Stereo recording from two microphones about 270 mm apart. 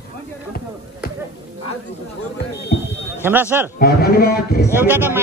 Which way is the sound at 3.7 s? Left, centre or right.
Left.